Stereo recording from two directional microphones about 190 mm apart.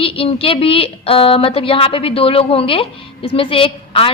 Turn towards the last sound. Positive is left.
turn(degrees=30)  # may be behind; listen again after turning